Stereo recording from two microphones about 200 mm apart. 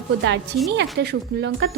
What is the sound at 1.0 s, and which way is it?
Speech, 55° right (ahead or behind).